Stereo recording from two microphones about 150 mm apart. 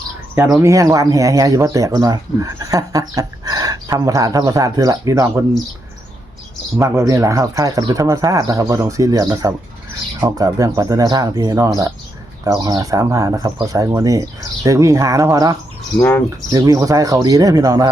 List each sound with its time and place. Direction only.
0.3 s speech: 20° right (ahead or behind)
6.7 s speech: 20° right (ahead or behind)
16.0 s speech: 15° left (ahead or behind)
16.5 s speech: 25° right (ahead or behind)